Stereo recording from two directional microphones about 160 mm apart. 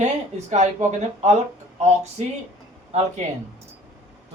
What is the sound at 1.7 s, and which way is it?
Speech, 45° right (ahead or behind).